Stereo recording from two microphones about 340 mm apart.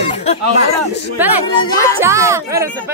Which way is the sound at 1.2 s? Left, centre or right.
Centre.